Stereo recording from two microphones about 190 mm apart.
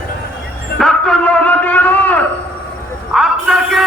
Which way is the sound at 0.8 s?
5° left (ahead or behind).